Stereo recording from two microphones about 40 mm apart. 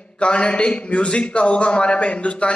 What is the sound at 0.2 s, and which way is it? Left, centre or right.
A man's voice, left.